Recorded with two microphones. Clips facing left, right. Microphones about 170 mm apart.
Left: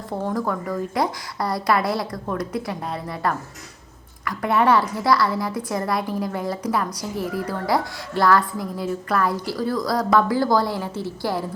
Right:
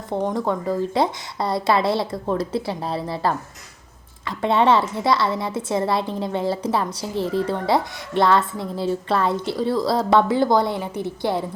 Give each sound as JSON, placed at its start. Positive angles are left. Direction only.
{"t": 0.1, "sound": "a woman's voice", "side_deg": -20}